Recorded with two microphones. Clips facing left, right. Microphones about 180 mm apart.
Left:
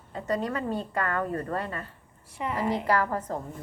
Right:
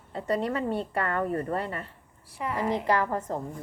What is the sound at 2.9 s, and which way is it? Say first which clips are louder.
Speech: even; 20° right (ahead or behind).